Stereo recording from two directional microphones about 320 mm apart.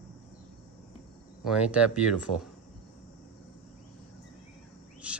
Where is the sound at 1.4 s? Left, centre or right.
Centre.